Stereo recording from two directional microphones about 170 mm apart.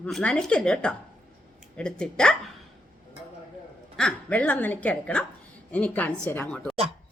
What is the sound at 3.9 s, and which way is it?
A woman's voice, 5° left (ahead or behind).